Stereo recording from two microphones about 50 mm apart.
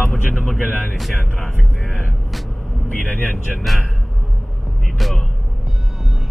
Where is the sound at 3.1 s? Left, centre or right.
Left.